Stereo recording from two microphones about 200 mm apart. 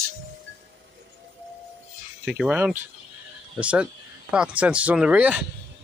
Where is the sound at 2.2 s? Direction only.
5° right (ahead or behind).